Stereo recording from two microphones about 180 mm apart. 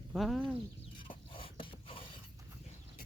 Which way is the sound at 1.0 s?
30° left (ahead or behind).